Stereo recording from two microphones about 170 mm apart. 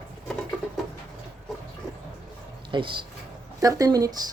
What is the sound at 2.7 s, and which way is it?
Speech, 30° right (ahead or behind).